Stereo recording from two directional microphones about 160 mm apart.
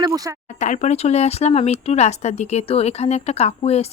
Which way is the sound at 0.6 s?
50° left (ahead or behind).